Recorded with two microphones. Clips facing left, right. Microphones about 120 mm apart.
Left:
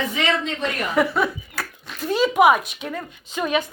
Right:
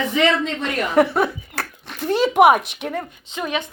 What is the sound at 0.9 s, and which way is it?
A child's voice, 50° right (ahead or behind).